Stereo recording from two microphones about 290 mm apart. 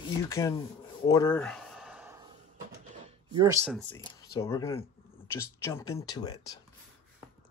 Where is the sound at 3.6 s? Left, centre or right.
Centre.